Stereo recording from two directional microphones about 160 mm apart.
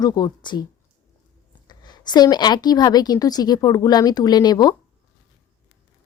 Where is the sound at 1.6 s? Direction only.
25° left (ahead or behind).